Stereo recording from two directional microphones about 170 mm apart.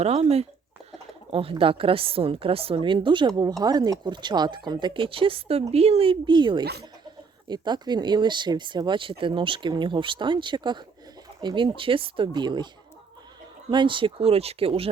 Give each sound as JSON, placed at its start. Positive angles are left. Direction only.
{"t": 0.0, "sound": "a woman's voice", "side_deg": -35}
{"t": 13.7, "sound": "a woman's voice", "side_deg": -30}